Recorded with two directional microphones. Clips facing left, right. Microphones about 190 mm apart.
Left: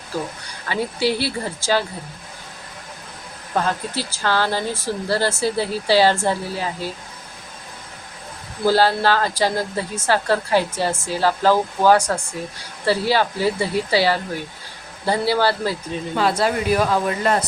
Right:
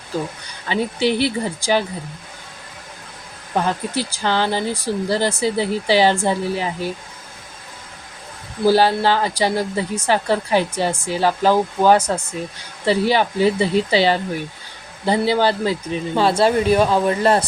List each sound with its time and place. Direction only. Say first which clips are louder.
0.7 s speech: right 2 dB; 20° right (ahead or behind)
3.5 s speech: right 2 dB; 15° right (ahead or behind)
8.6 s speech: right 2 dB; 15° right (ahead or behind); by 17.4 s 30° right (ahead or behind)